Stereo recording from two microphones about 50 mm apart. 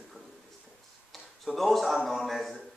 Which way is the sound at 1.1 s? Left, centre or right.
Centre.